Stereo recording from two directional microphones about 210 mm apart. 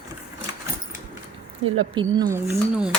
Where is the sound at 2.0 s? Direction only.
20° right (ahead or behind).